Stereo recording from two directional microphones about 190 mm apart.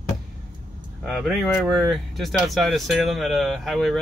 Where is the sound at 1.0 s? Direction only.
Centre (ahead or behind).